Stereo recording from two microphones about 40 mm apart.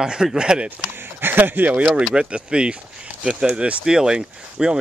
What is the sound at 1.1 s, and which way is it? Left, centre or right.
Speech, right.